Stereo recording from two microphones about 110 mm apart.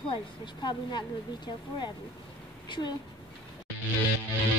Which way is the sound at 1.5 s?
45° left (ahead or behind).